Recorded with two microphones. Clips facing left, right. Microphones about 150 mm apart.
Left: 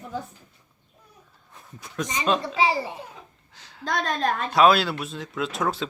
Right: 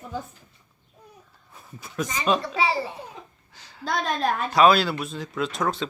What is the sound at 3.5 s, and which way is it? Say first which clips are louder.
Speech: even; centre (ahead or behind).